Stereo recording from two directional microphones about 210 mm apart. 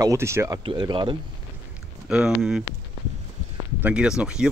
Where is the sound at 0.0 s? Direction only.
15° right (ahead or behind).